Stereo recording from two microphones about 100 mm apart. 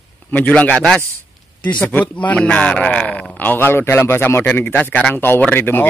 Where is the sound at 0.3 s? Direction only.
15° left (ahead or behind).